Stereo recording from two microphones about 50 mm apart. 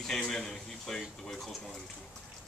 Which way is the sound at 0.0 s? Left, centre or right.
Centre.